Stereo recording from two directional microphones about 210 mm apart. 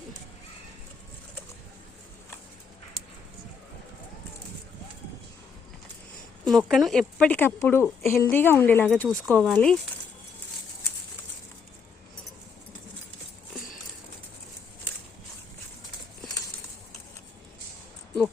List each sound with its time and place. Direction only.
6.4 s speech: centre (ahead or behind)